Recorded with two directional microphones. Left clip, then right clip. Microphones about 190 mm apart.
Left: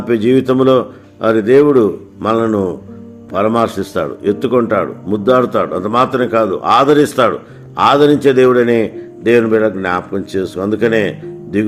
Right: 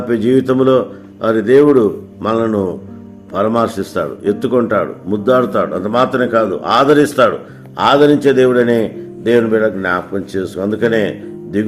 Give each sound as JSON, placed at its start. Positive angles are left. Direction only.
{"t": 0.1, "sound": "speech", "side_deg": 30}